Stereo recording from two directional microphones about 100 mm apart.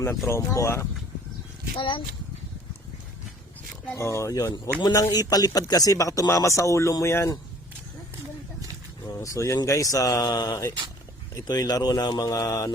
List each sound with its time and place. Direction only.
0.3 s speech: 30° left (ahead or behind)
1.8 s speech: 60° left (ahead or behind)
3.9 s speech: 30° left (ahead or behind)
9.0 s speech: 35° left (ahead or behind)